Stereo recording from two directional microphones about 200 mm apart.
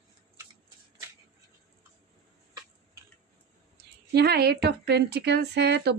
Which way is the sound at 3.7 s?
55° right (ahead or behind).